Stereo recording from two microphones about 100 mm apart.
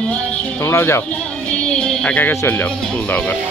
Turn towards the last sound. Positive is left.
turn(degrees=15)  # may be behind; listen again after turning